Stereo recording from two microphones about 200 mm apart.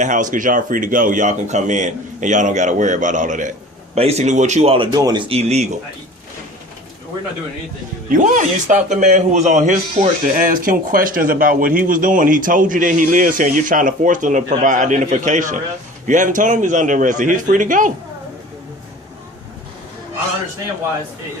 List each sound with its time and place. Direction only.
0.0 s a man's voice: 40° right (ahead or behind)
8.1 s a man's voice: 40° right (ahead or behind)